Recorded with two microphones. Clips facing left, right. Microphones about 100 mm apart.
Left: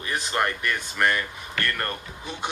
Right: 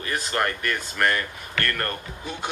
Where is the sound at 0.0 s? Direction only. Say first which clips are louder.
Even; 20° left (ahead or behind).